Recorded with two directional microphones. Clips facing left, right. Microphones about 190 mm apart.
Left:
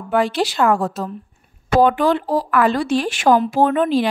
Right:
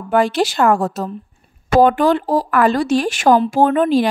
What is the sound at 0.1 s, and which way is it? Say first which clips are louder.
A woman's voice: right 3 dB; 45° right (ahead or behind).